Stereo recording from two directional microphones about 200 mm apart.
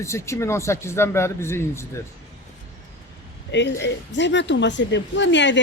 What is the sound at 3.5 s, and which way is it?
A woman's voice, 60° left (ahead or behind).